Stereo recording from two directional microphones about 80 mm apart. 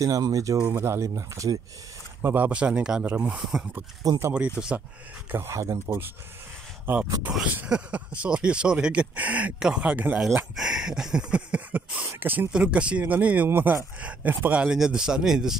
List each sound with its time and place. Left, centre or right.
0.0 s speech: right
2.2 s speech: right
5.3 s speech: right
7.5 s speech: centre
10.5 s speech: centre; by 12.4 s right
12.5 s speech: centre
14.7 s speech: centre